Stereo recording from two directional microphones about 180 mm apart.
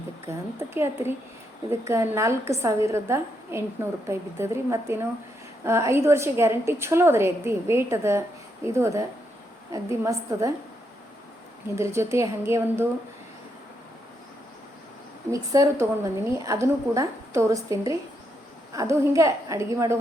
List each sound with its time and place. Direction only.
0.3 s a woman's voice: 15° right (ahead or behind)
11.8 s a woman's voice: 15° right (ahead or behind)
15.3 s a woman's voice: 15° right (ahead or behind)